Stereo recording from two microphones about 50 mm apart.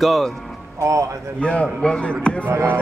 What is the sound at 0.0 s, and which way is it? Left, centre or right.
Speech, centre.